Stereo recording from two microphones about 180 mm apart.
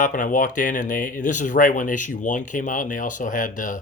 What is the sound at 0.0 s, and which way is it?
Speech, 45° left (ahead or behind).